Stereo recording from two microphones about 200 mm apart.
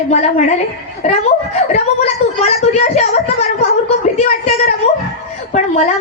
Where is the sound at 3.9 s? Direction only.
30° left (ahead or behind).